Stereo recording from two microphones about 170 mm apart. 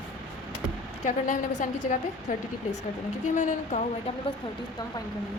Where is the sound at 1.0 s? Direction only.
45° left (ahead or behind).